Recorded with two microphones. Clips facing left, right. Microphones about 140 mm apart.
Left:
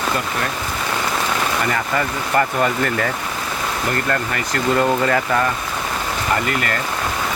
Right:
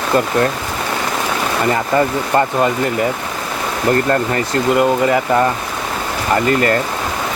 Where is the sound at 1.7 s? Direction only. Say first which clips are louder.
Right 6 dB; 25° right (ahead or behind).